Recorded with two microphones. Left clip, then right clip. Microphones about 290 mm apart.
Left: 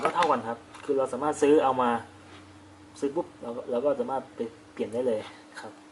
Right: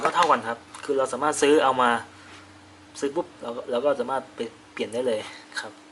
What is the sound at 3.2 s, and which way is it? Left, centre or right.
A man's voice, centre.